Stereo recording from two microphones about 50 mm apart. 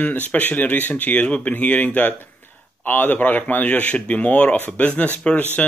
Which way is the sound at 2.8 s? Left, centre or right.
Left.